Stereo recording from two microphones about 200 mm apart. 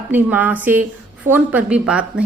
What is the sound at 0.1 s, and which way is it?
A woman's voice, 10° right (ahead or behind).